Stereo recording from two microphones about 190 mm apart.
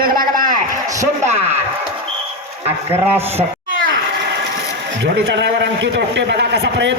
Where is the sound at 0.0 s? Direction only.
50° right (ahead or behind).